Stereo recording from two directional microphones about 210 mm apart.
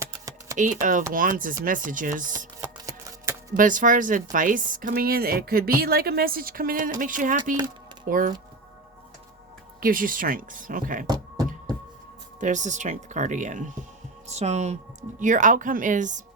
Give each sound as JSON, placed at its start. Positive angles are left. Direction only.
{"t": 0.0, "sound": "typing", "side_deg": -15}
{"t": 0.5, "sound": "speech", "side_deg": -40}
{"t": 2.6, "sound": "shuffling cards", "side_deg": -15}
{"t": 3.5, "sound": "speech", "side_deg": -40}
{"t": 9.8, "sound": "speech", "side_deg": -40}
{"t": 11.0, "sound": "music", "side_deg": -20}
{"t": 12.4, "sound": "speech", "side_deg": -35}